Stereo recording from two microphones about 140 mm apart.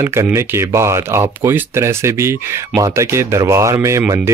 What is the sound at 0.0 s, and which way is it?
Speech, 20° right (ahead or behind).